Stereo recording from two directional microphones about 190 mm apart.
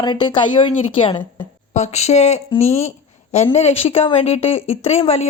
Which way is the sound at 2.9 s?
35° left (ahead or behind).